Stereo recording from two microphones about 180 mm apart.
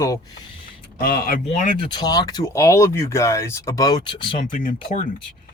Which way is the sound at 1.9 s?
20° left (ahead or behind).